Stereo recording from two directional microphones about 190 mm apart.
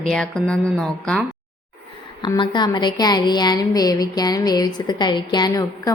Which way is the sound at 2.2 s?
25° left (ahead or behind).